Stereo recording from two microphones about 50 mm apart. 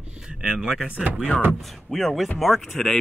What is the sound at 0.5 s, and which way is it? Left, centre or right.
Speech, centre.